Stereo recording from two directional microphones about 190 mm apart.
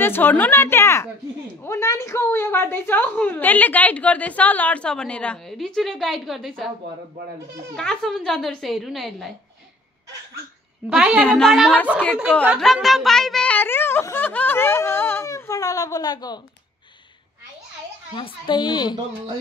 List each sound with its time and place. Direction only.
0.0 s a woman's voice: 10° left (ahead or behind)
7.7 s a woman's voice: 5° left (ahead or behind)
10.9 s a woman's voice: 5° right (ahead or behind); by 16.3 s 20° left (ahead or behind)
18.1 s speech: 25° left (ahead or behind)